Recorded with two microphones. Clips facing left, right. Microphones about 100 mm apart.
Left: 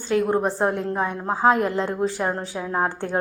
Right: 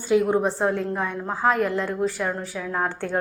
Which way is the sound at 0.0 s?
5° right (ahead or behind).